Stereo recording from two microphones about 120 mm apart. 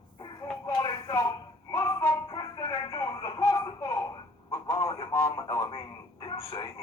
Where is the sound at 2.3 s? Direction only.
30° left (ahead or behind).